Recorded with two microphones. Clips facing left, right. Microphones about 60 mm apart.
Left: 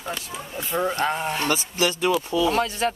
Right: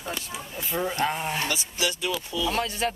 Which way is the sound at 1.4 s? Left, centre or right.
Left.